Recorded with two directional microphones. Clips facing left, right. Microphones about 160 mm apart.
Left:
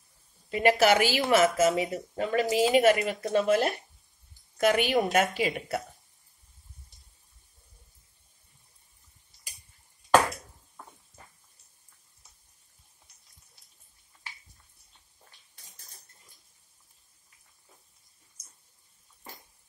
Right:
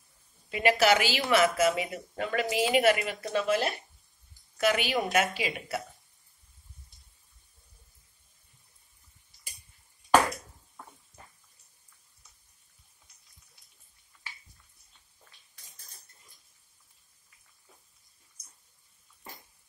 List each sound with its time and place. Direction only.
0.5 s a woman's voice: 40° left (ahead or behind)